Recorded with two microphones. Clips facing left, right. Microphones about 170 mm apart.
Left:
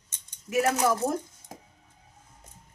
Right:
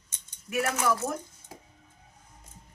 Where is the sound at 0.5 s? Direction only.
25° left (ahead or behind).